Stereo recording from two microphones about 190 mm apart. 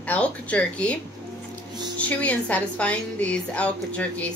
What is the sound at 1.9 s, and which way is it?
A woman's voice, 5° left (ahead or behind).